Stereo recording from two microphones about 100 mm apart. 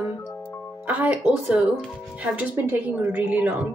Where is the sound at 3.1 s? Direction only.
15° right (ahead or behind).